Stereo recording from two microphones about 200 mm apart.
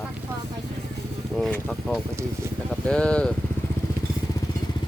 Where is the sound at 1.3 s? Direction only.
5° left (ahead or behind).